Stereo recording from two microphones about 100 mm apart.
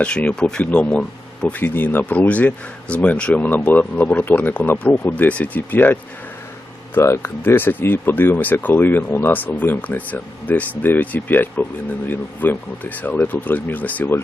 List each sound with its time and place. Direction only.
0.0 s speech: 10° left (ahead or behind)